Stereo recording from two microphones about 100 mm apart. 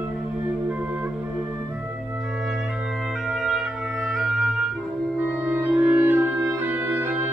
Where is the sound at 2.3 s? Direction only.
5° right (ahead or behind).